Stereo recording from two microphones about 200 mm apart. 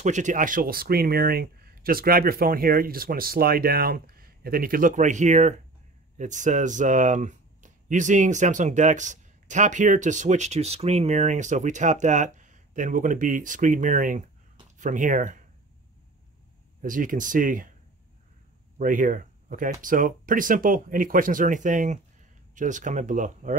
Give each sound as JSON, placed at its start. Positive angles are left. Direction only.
{"t": 0.0, "sound": "speech", "side_deg": -35}
{"t": 16.8, "sound": "speech", "side_deg": -40}
{"t": 18.8, "sound": "speech", "side_deg": -40}